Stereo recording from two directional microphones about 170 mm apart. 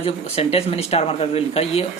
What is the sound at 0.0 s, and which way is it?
Speech, 35° left (ahead or behind).